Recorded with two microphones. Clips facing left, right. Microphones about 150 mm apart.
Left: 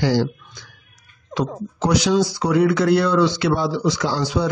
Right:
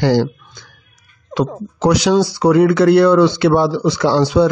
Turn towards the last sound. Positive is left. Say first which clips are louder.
# right 9 dB
turn(degrees=-65)  # may be behind; listen again after turning